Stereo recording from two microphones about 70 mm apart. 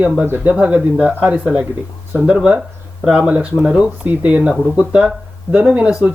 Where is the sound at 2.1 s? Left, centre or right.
Centre.